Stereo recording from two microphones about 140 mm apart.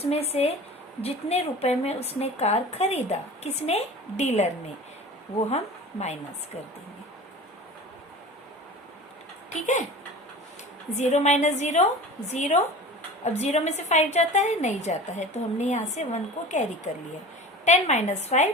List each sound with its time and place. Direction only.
0.0 s a woman's voice: 45° left (ahead or behind)
9.5 s a woman's voice: 55° left (ahead or behind)
10.9 s a woman's voice: 55° left (ahead or behind)